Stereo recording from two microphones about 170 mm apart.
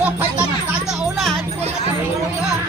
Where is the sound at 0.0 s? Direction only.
10° right (ahead or behind).